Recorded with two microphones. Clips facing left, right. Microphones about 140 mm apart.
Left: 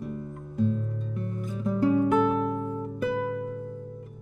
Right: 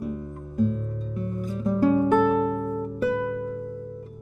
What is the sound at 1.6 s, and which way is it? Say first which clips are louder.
Music: right 2 dB; 5° right (ahead or behind).